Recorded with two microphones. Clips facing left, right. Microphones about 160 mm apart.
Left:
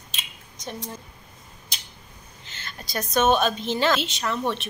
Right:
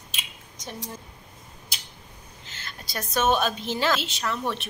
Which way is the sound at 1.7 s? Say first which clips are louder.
Left 2 dB; 5° right (ahead or behind).